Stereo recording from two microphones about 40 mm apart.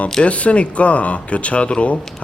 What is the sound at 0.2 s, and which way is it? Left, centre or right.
Speech, left.